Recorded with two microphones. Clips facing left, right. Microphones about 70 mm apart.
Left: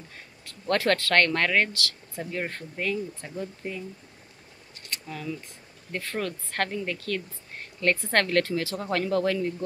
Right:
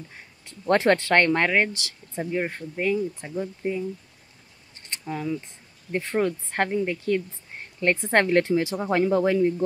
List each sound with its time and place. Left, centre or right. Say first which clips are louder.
0.5 s speech: right 4 dB; right
4.8 s a sound: right 5 dB; right
5.9 s speech: right 7 dB; right